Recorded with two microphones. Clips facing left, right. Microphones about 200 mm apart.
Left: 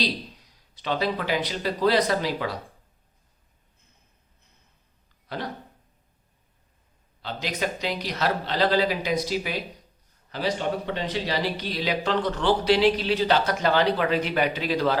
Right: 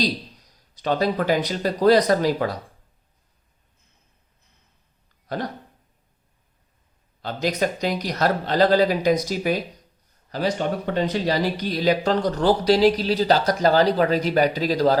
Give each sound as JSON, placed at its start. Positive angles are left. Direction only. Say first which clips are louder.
{"t": 0.0, "sound": "speech", "louder": "right 4 dB", "side_deg": -40}
{"t": 5.3, "sound": "speech", "louder": "right 5 dB", "side_deg": -45}
{"t": 7.2, "sound": "speech", "louder": "right 6 dB", "side_deg": -45}